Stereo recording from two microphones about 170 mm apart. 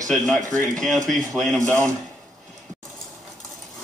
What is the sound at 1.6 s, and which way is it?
Speech, 15° right (ahead or behind).